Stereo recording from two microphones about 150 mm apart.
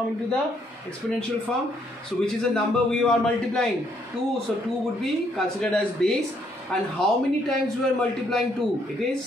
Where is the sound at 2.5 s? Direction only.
5° left (ahead or behind).